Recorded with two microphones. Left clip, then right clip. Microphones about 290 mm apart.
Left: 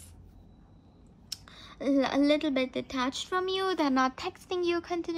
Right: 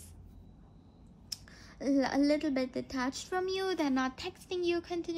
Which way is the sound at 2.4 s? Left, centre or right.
Centre.